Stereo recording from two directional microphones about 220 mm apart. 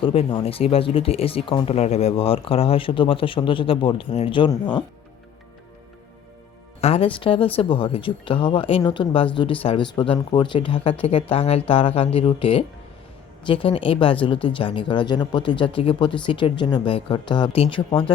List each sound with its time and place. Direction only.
0.0 s speech: 25° left (ahead or behind)
6.8 s speech: 25° left (ahead or behind)